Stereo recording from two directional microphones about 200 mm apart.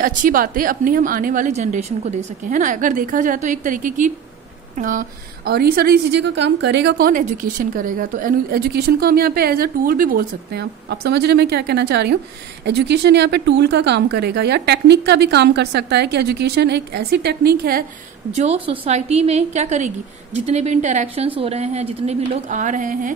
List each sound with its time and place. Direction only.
0.0 s a woman's voice: 40° right (ahead or behind)
18.3 s a woman's voice: 35° right (ahead or behind)